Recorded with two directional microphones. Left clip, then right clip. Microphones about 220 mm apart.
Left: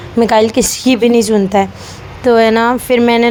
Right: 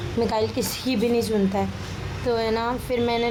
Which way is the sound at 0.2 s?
35° left (ahead or behind).